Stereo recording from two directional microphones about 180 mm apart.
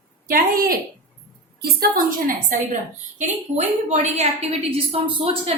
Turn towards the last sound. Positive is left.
turn(degrees=-30)  # may be behind; listen again after turning